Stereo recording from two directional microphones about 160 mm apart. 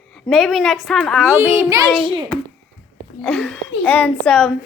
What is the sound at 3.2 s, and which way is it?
A woman's voice, 5° left (ahead or behind).